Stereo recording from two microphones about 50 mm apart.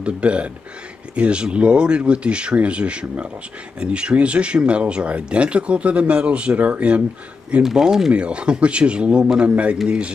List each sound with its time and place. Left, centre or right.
0.0 s speech: right
7.6 s speech: centre
8.1 s speech: right